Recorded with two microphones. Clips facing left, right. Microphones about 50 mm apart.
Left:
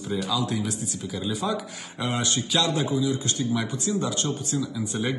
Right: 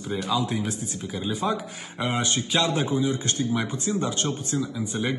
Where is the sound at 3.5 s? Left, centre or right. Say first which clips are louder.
Even; right.